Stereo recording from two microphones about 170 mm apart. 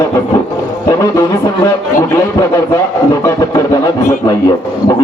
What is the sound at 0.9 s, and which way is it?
A man's voice, 20° left (ahead or behind).